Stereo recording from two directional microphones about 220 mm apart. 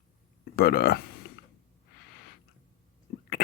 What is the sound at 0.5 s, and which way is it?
Speech, 45° left (ahead or behind).